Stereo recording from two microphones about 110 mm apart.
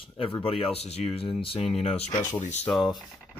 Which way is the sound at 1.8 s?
75° left (ahead or behind).